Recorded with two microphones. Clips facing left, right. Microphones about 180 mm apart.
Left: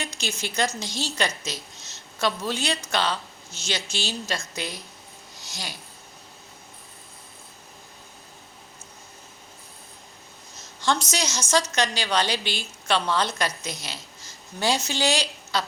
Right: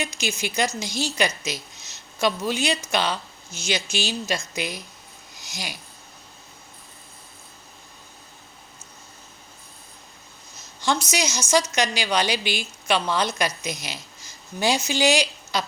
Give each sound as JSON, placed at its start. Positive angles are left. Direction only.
{"t": 0.0, "sound": "a woman's voice", "side_deg": -10}
{"t": 10.8, "sound": "a woman's voice", "side_deg": -10}